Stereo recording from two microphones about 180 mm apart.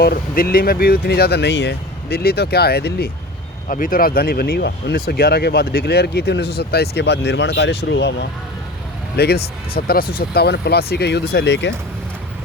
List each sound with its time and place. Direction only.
0.0 s speech: 55° left (ahead or behind)
3.7 s speech: 50° left (ahead or behind); by 11.7 s 85° left